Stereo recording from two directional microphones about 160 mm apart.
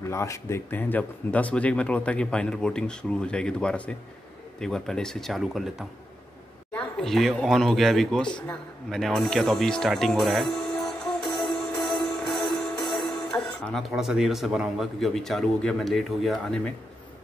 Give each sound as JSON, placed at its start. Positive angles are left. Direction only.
{"t": 0.1, "sound": "speech", "side_deg": 20}
{"t": 11.8, "sound": "music", "side_deg": 0}